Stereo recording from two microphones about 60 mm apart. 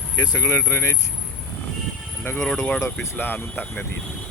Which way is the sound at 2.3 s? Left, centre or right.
Centre.